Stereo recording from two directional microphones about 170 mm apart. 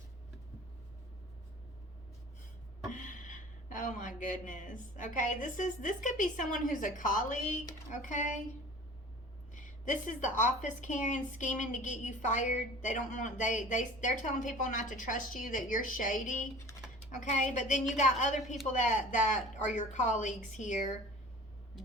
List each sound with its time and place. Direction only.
2.9 s a woman's voice: 50° left (ahead or behind)
9.9 s a woman's voice: 50° left (ahead or behind)